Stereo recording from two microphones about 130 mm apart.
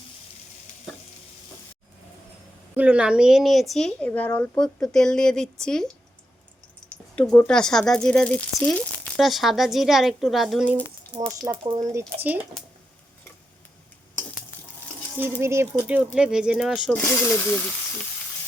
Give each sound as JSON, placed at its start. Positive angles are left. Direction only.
{"t": 2.7, "sound": "speech", "side_deg": -10}
{"t": 6.9, "sound": "speech", "side_deg": 10}
{"t": 11.3, "sound": "speech", "side_deg": -25}
{"t": 15.2, "sound": "speech", "side_deg": -20}
{"t": 16.9, "sound": "speech", "side_deg": 15}